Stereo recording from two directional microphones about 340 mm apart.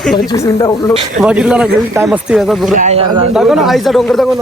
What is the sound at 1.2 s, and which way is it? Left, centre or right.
Speech, centre.